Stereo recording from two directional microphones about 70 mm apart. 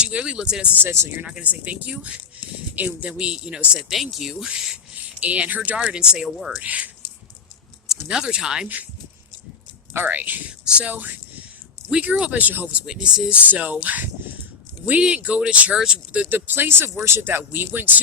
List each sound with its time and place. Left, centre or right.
0.0 s speech: centre
0.8 s speech: right
1.3 s speech: centre
3.8 s speech: centre
5.2 s speech: right; by 6.5 s centre
6.6 s speech: right
8.0 s speech: centre
9.9 s speech: right
12.8 s speech: centre
13.5 s speech: right
16.3 s speech: right